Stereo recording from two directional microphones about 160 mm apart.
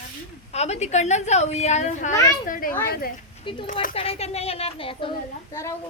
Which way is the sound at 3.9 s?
40° left (ahead or behind).